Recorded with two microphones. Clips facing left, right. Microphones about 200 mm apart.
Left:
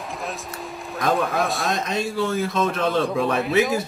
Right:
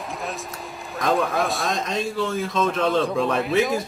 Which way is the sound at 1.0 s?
Centre (ahead or behind).